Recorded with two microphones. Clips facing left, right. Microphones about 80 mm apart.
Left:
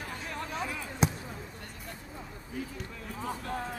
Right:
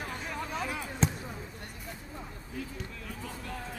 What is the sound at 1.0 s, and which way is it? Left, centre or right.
Basketball bounce, centre.